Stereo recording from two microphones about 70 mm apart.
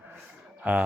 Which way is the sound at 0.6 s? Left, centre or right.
Centre.